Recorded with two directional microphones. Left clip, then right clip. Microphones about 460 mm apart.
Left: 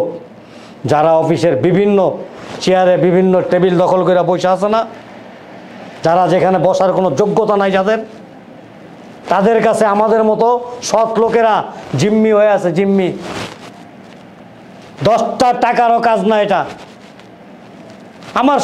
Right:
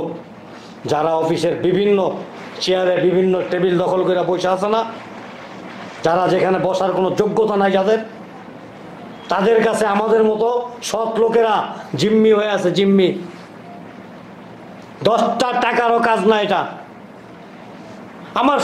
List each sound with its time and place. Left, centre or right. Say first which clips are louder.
0.8 s a man's voice: left 6 dB; left
6.0 s a man's voice: left 4 dB; left
9.3 s a man's voice: left 4 dB; left
12.2 s a man's voice: left 5 dB; centre
15.3 s a man's voice: left 5 dB; left
18.3 s speech: left 4 dB; left